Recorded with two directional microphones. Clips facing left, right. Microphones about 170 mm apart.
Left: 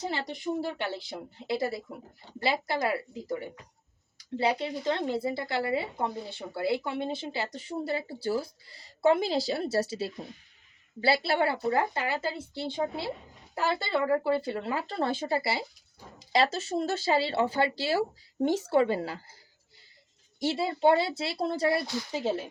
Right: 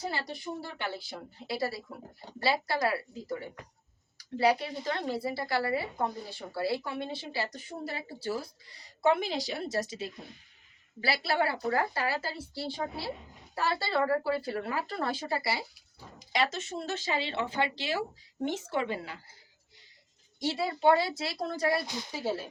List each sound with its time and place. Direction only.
0.0 s speech: 20° left (ahead or behind)
20.4 s speech: 25° left (ahead or behind)